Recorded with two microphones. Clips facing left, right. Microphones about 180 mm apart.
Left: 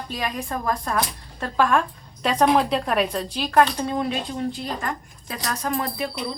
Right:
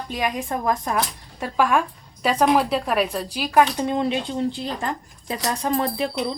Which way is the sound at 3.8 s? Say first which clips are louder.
Right 3 dB; 20° right (ahead or behind).